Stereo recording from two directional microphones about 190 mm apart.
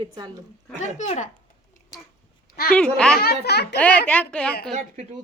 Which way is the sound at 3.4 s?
60° left (ahead or behind).